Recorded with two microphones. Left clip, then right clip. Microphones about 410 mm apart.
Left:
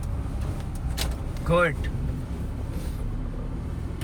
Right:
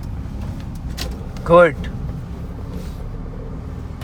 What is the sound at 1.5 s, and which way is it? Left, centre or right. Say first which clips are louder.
Speech: right 11 dB; centre.